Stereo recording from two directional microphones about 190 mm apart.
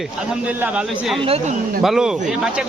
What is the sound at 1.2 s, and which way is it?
Speech, 30° right (ahead or behind).